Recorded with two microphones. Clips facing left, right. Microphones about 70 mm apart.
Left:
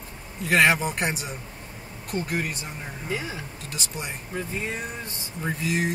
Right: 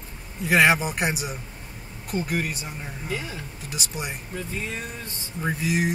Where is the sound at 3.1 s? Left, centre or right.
Left.